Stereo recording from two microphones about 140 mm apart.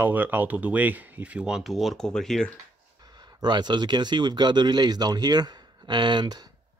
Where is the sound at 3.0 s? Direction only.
30° right (ahead or behind).